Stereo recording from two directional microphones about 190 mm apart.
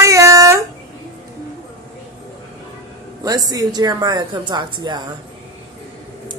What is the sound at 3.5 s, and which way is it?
A woman's voice, 20° right (ahead or behind).